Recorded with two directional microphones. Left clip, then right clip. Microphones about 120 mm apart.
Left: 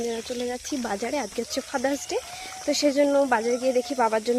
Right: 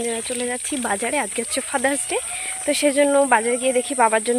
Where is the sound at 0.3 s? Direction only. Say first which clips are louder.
Right 4 dB; 35° right (ahead or behind).